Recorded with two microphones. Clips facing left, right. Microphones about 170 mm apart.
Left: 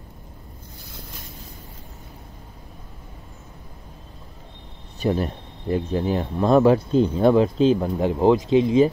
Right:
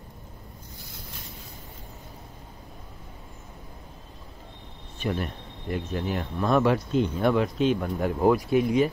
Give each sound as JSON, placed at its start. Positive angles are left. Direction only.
{"t": 4.9, "sound": "speech", "side_deg": 35}